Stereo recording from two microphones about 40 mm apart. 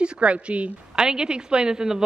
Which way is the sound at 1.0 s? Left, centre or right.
Centre.